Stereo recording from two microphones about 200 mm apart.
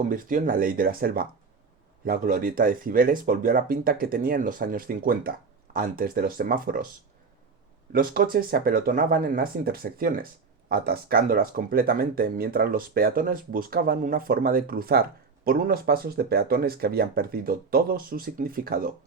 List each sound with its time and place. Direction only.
0.1 s speech: 45° right (ahead or behind)
7.9 s speech: 45° right (ahead or behind)